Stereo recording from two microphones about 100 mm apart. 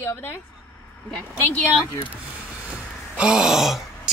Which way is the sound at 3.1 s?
10° right (ahead or behind).